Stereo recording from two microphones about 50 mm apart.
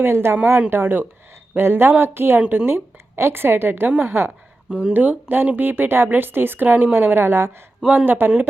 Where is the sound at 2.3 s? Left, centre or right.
Right.